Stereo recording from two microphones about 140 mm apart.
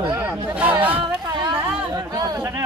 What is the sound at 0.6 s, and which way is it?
Chatter, 10° right (ahead or behind).